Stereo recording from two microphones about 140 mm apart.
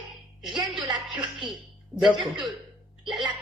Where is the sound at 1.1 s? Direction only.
35° right (ahead or behind).